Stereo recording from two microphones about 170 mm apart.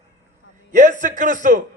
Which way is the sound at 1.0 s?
45° right (ahead or behind).